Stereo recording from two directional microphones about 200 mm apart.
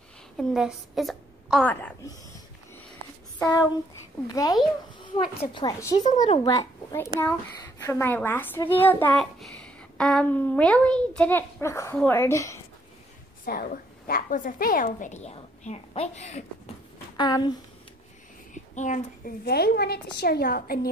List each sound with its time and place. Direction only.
0.4 s a woman's voice: centre (ahead or behind)
4.3 s a child's voice: 20° left (ahead or behind)
6.0 s a woman's voice: 35° left (ahead or behind)
6.5 s a child's voice: 15° left (ahead or behind)
13.5 s a woman's voice: 45° left (ahead or behind)
17.2 s a woman's voice: 20° left (ahead or behind)
18.5 s a woman's voice: 40° left (ahead or behind)